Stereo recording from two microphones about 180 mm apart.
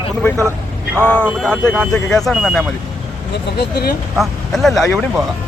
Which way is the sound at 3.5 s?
65° left (ahead or behind).